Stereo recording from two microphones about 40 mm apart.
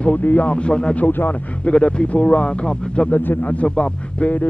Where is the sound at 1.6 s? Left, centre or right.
Left.